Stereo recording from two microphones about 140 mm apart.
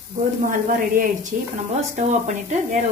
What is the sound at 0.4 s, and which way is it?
Speech, 75° right (ahead or behind).